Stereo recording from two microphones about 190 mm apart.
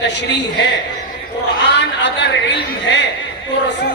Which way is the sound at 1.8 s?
65° left (ahead or behind).